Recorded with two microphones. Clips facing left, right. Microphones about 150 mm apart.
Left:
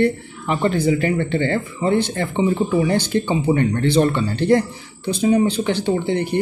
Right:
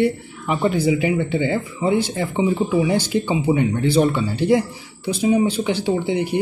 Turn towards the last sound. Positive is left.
turn(degrees=-5)  # may be behind; listen again after turning